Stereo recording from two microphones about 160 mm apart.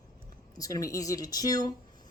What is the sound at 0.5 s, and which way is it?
Speech, 20° left (ahead or behind).